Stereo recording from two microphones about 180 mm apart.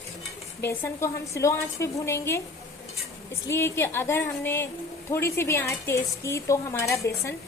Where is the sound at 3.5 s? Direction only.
15° left (ahead or behind).